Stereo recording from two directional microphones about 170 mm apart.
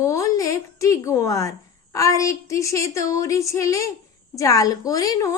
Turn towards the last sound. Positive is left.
turn(degrees=20)  # may be behind; listen again after turning